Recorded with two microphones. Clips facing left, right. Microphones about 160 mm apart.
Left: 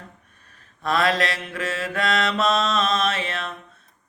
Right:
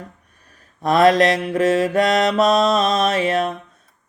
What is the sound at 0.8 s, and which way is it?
Mantra, 40° right (ahead or behind).